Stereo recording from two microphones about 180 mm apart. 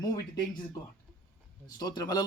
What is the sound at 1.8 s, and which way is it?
Speech, 20° left (ahead or behind).